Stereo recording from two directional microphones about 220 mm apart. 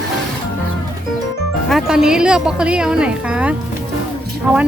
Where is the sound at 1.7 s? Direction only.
5° right (ahead or behind).